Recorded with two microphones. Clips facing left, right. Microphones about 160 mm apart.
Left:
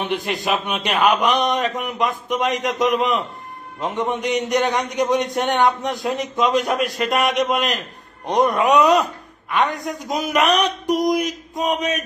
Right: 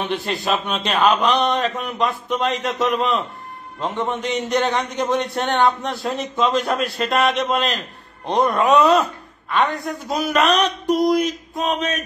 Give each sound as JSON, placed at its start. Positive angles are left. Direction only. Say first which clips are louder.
{"t": 0.1, "sound": "a man's voice", "louder": "even", "side_deg": 15}